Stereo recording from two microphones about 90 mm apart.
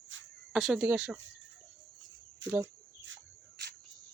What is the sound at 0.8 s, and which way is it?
Speech, 15° right (ahead or behind).